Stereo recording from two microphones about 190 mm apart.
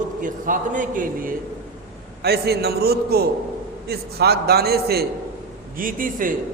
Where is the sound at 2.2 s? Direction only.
55° right (ahead or behind).